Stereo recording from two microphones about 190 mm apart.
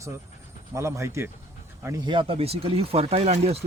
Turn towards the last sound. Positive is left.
turn(degrees=-35)  # may be behind; listen again after turning